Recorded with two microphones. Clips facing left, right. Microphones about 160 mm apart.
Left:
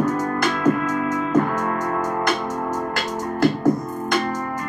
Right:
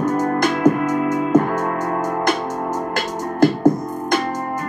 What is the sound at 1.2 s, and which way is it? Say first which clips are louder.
Music: right 2 dB; 35° right (ahead or behind).